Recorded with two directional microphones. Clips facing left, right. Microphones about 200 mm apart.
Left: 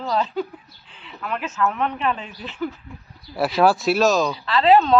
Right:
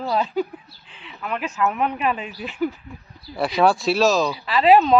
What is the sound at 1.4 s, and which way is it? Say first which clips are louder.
Speech: right 1 dB; 10° right (ahead or behind).